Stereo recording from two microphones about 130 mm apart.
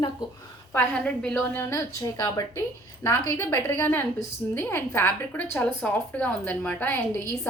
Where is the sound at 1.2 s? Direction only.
10° left (ahead or behind).